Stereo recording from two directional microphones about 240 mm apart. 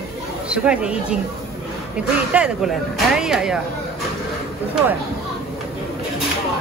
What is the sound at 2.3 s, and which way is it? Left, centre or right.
Speech, centre.